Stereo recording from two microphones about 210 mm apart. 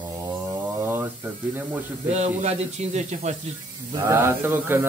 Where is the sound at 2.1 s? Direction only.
30° right (ahead or behind).